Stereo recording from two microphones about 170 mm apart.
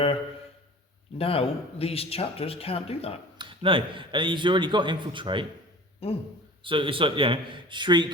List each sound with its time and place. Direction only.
1.2 s speech: 35° left (ahead or behind)
3.3 s a man's voice: 30° right (ahead or behind)
6.0 s speech: 35° left (ahead or behind)
6.7 s a man's voice: 30° right (ahead or behind)